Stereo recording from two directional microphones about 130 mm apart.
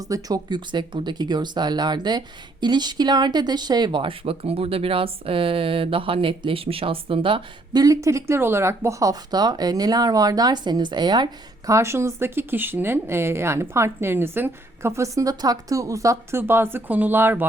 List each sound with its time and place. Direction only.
0.0 s speech: 30° right (ahead or behind)